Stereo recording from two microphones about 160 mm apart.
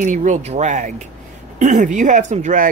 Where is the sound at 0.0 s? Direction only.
50° right (ahead or behind).